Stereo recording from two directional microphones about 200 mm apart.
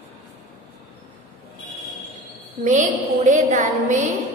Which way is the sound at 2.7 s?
40° right (ahead or behind).